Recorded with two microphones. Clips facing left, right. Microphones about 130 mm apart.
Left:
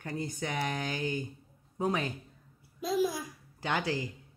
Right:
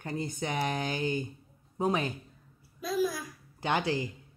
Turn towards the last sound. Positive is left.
turn(degrees=-25)  # may be behind; listen again after turning